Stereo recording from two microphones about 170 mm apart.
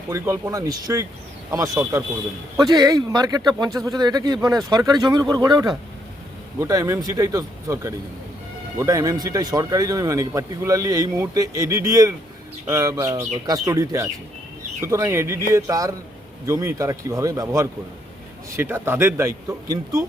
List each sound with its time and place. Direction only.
0.1 s a man's voice: 15° right (ahead or behind)